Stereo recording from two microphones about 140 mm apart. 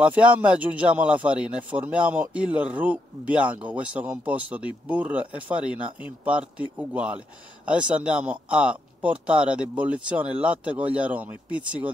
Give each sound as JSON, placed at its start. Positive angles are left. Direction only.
{"t": 0.0, "sound": "speech", "side_deg": -10}